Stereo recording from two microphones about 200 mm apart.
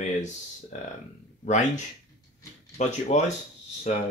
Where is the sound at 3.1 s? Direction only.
35° left (ahead or behind).